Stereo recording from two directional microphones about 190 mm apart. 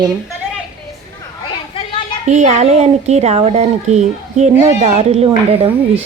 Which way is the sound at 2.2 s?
40° right (ahead or behind).